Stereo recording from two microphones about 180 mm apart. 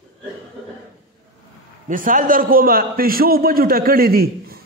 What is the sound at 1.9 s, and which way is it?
A man's voice, 50° right (ahead or behind).